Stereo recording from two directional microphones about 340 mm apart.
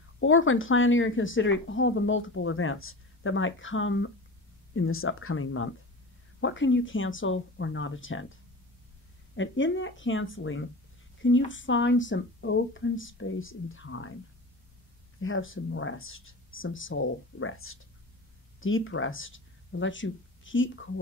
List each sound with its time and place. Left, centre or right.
0.2 s a woman's voice: left
15.1 s a woman's voice: left